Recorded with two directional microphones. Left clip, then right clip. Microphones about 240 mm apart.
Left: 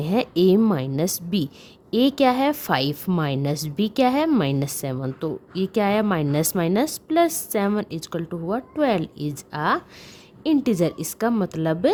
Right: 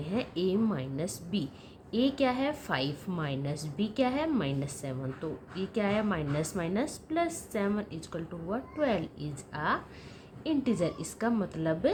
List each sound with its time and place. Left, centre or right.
0.0 s a woman's voice: left